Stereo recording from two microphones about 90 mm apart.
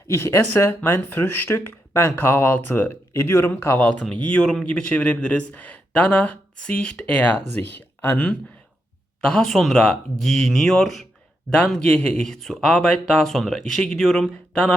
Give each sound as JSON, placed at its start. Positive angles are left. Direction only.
{"t": 0.1, "sound": "speech", "side_deg": 30}
{"t": 9.2, "sound": "speech", "side_deg": 5}